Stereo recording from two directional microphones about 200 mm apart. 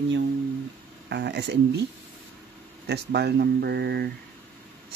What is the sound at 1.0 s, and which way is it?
Speech, 60° right (ahead or behind).